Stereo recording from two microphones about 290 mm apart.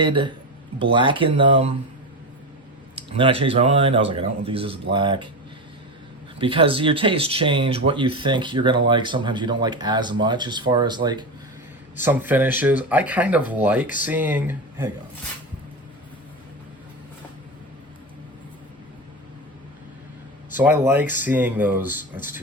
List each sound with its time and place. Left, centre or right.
0.0 s speech: centre
2.9 s speech: centre
6.4 s speech: centre
20.6 s speech: centre